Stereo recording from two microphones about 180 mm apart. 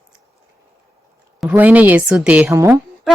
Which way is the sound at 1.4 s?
5° right (ahead or behind).